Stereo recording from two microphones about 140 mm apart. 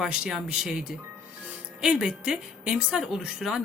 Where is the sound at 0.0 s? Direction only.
5° right (ahead or behind).